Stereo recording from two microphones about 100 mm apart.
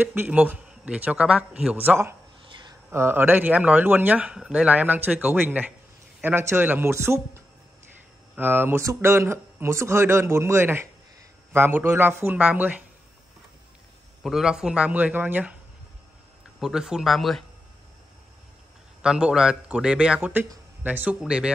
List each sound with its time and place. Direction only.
0.0 s a man's voice: 20° right (ahead or behind)
14.2 s speech: 5° right (ahead or behind)
16.5 s speech: 5° right (ahead or behind)
19.0 s speech: 10° right (ahead or behind)